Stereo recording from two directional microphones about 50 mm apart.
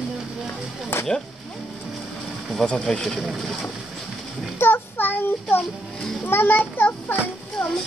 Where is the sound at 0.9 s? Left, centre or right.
Left.